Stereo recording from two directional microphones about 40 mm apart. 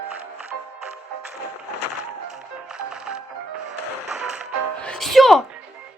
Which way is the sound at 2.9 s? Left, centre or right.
Centre.